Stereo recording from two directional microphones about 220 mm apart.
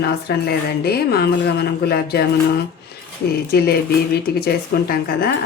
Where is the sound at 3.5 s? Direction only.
45° left (ahead or behind).